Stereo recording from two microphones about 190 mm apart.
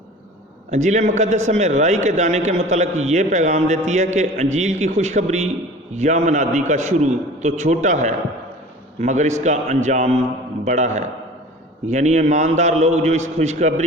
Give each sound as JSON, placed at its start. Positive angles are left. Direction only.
{"t": 0.7, "sound": "a man's voice", "side_deg": -40}